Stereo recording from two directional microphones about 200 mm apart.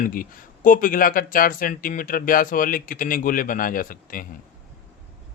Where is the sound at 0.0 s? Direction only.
45° left (ahead or behind).